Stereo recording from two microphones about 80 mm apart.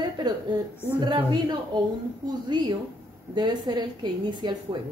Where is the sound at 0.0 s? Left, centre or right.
Right.